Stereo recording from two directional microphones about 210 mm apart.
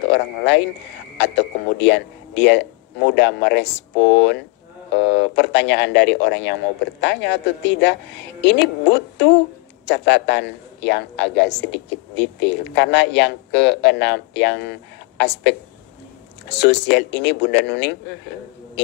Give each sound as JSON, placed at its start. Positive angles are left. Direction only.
{"t": 0.0, "sound": "a man's voice", "side_deg": 55}